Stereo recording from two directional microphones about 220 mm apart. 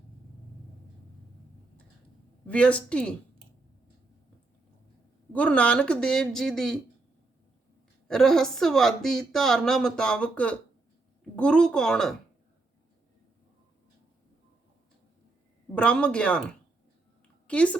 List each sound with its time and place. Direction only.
2.5 s a woman's voice: 5° left (ahead or behind)
5.3 s a woman's voice: 5° left (ahead or behind)
8.0 s a woman's voice: centre (ahead or behind)
15.7 s a woman's voice: 5° left (ahead or behind)
17.4 s a woman's voice: 5° left (ahead or behind)